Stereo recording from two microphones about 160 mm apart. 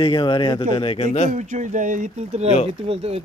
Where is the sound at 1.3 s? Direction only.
50° right (ahead or behind).